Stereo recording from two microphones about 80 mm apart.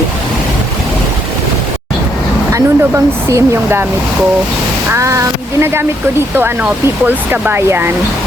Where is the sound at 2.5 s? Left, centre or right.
Right.